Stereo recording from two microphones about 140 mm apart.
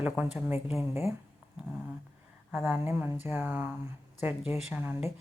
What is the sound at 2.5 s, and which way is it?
A woman's voice, 10° right (ahead or behind).